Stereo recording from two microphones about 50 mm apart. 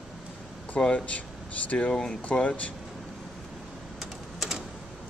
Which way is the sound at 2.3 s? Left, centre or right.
Left.